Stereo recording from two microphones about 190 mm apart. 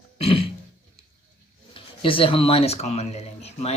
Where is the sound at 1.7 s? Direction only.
30° left (ahead or behind).